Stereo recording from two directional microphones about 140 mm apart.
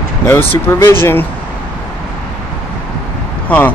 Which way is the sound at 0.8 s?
15° left (ahead or behind).